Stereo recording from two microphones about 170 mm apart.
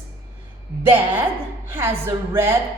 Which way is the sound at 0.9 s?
10° right (ahead or behind).